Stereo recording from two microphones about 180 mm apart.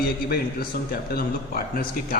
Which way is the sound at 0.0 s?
60° left (ahead or behind).